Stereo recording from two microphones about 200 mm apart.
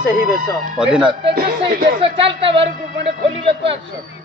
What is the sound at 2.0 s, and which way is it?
Speech, 25° right (ahead or behind).